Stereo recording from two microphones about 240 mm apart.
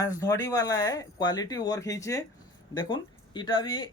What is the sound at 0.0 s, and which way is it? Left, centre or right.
Speech, centre.